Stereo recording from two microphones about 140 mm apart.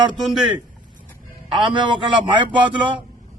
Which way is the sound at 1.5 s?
35° right (ahead or behind).